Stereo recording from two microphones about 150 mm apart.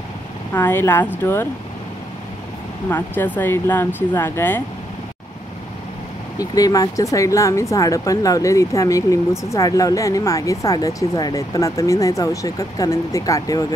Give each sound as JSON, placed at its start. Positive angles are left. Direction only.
{"t": 0.5, "sound": "speech", "side_deg": 15}
{"t": 3.3, "sound": "speech", "side_deg": 15}
{"t": 6.3, "sound": "speech", "side_deg": 25}